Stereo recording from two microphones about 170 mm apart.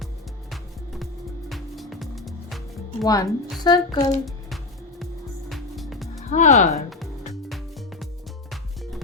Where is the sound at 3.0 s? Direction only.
20° left (ahead or behind).